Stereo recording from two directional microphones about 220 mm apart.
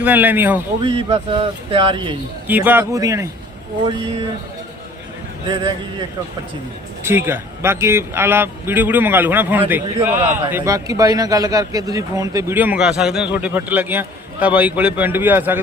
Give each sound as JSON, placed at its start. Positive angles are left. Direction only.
{"t": 0.0, "sound": "a man's voice", "side_deg": -10}
{"t": 0.9, "sound": "speech", "side_deg": -25}
{"t": 2.5, "sound": "a man's voice", "side_deg": -10}
{"t": 7.0, "sound": "a man's voice", "side_deg": -10}